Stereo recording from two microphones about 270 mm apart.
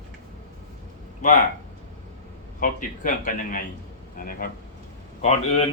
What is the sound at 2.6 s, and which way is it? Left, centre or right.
Speech, left.